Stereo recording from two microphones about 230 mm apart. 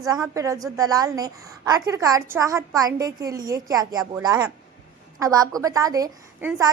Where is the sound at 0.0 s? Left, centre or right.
Centre.